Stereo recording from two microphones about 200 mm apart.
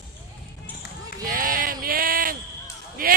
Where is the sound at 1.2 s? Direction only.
45° right (ahead or behind).